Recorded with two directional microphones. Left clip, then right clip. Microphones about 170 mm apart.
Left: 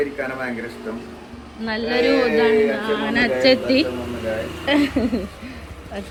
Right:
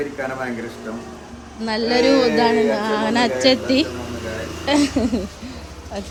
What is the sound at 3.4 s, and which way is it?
Speech, 10° right (ahead or behind).